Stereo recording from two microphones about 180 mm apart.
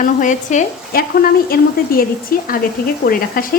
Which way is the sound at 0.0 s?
45° left (ahead or behind).